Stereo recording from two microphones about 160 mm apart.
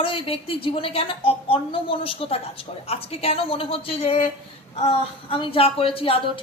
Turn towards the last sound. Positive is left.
turn(degrees=35)  # may be behind; listen again after turning